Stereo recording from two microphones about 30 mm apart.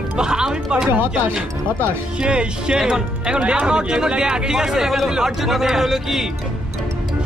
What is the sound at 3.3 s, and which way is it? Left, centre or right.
Speech, right.